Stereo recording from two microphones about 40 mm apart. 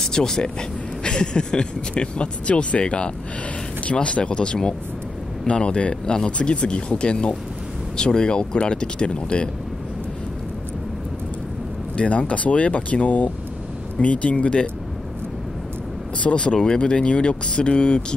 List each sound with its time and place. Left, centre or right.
0.0 s speech: centre
12.0 s speech: left
16.2 s speech: left